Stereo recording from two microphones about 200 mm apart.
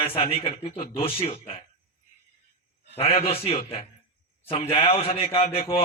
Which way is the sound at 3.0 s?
30° left (ahead or behind).